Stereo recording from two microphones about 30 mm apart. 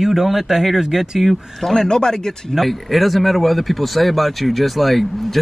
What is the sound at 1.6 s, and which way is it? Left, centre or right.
Speech, centre.